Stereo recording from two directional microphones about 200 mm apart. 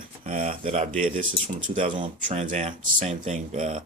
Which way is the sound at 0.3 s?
40° right (ahead or behind).